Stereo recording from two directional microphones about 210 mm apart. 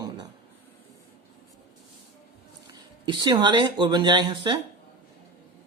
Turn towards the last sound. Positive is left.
turn(degrees=-20)  # may be behind; listen again after turning